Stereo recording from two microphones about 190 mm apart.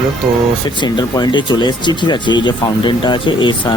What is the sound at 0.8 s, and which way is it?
Speech, 20° left (ahead or behind).